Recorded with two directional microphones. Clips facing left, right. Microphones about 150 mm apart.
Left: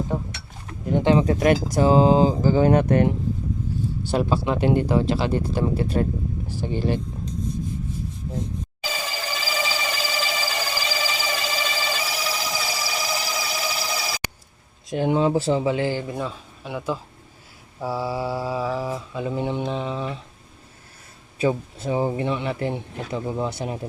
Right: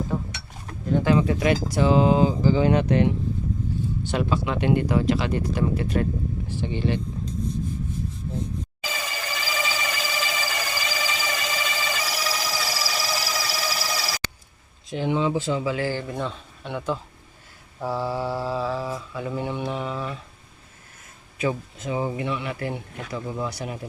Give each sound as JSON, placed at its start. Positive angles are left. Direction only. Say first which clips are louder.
{"t": 0.9, "sound": "speech", "louder": "left 2 dB", "side_deg": 25}
{"t": 1.3, "sound": "speech", "louder": "left 3 dB", "side_deg": 45}
{"t": 4.1, "sound": "speech", "louder": "left 3 dB", "side_deg": 35}
{"t": 6.6, "sound": "speech", "louder": "left 2 dB", "side_deg": 40}
{"t": 8.8, "sound": "a sound", "louder": "left 4 dB", "side_deg": 30}
{"t": 12.0, "sound": "music", "louder": "even", "side_deg": 10}
{"t": 12.5, "sound": "a sound", "louder": "left 1 dB", "side_deg": 20}
{"t": 14.8, "sound": "speech", "louder": "left 3 dB", "side_deg": 45}
{"t": 17.7, "sound": "mantra", "louder": "even", "side_deg": 10}
{"t": 21.3, "sound": "speech", "louder": "left 4 dB", "side_deg": 30}